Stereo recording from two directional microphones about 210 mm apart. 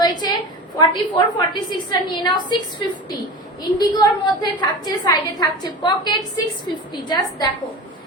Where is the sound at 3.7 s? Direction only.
20° left (ahead or behind).